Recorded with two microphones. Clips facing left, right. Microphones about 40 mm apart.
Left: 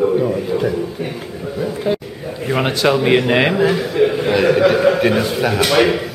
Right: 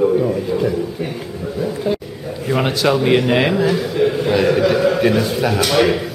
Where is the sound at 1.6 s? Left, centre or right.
Centre.